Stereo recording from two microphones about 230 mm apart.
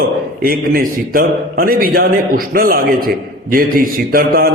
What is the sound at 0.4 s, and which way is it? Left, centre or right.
A man's voice, right.